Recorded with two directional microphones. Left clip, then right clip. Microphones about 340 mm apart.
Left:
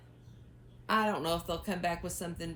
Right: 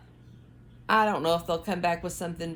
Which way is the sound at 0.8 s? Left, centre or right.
Centre.